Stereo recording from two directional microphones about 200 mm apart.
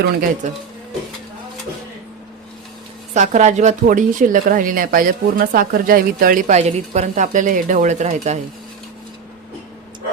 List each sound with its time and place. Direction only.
0.0 s speech: 45° right (ahead or behind)
3.2 s speech: 35° right (ahead or behind)